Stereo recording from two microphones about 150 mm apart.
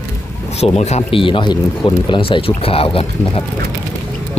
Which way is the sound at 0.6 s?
45° left (ahead or behind).